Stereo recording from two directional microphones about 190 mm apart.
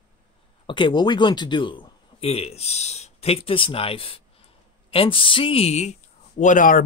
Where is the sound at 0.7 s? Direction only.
25° left (ahead or behind).